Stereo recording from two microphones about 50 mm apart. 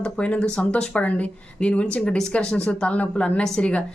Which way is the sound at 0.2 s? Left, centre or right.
Left.